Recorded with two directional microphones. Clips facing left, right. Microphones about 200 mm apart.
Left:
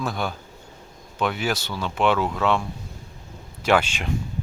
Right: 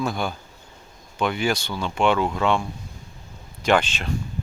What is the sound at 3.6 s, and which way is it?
Speech, 5° left (ahead or behind).